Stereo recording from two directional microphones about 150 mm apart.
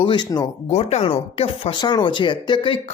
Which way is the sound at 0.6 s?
45° left (ahead or behind).